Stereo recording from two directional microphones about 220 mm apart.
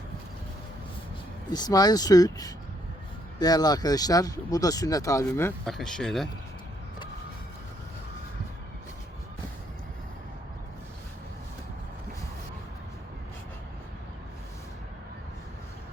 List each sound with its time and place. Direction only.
1.5 s speech: 15° left (ahead or behind); by 6.2 s centre (ahead or behind)